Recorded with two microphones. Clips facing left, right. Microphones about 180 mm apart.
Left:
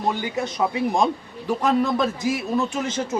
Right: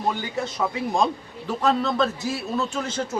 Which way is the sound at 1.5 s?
15° left (ahead or behind).